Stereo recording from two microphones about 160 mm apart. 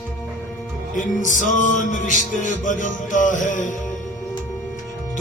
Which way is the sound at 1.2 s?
55° left (ahead or behind).